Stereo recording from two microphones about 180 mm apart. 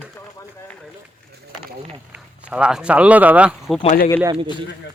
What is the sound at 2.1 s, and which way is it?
Speech, 5° right (ahead or behind).